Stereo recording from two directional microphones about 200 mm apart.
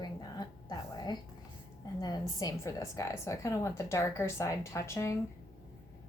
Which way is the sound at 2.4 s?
15° left (ahead or behind).